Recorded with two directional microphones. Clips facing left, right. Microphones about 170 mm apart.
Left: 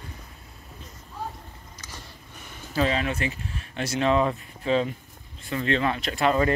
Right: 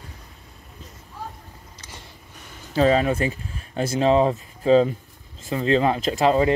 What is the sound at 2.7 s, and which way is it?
Speech, 35° right (ahead or behind).